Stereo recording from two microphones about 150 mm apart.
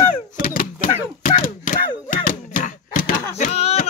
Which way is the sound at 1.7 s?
60° left (ahead or behind).